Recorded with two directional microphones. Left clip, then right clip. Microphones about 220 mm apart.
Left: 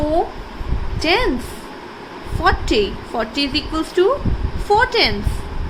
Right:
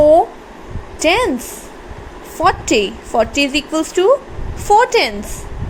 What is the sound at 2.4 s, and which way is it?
A woman's voice, 25° right (ahead or behind).